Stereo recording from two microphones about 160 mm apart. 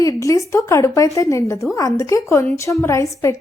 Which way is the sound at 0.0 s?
20° left (ahead or behind).